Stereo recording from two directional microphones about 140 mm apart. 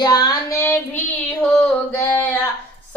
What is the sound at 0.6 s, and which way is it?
Female singing, 15° left (ahead or behind).